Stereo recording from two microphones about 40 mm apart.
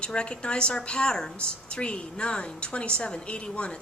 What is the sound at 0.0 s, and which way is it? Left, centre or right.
A woman's voice, left.